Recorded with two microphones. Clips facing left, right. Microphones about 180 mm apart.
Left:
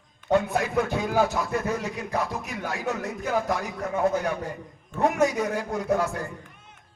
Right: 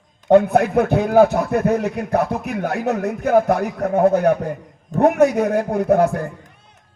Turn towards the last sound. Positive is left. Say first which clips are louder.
# right 9 dB
turn(degrees=-55)  # may be behind; listen again after turning